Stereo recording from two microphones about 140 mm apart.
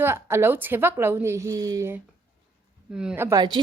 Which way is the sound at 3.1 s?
15° right (ahead or behind).